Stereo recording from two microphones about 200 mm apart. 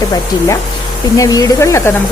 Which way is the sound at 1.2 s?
15° left (ahead or behind).